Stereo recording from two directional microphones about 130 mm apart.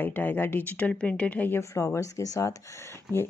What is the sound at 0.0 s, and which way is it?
A woman's voice, 15° left (ahead or behind).